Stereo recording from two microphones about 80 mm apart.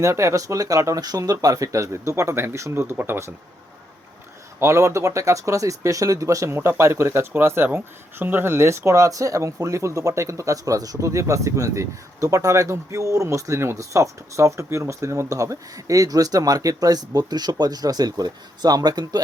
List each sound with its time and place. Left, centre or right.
0.0 s speech: right
4.6 s speech: right